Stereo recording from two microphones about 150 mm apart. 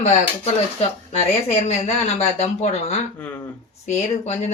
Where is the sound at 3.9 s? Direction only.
50° left (ahead or behind).